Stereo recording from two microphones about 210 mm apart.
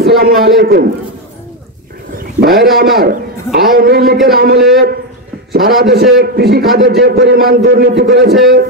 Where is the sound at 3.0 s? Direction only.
45° right (ahead or behind).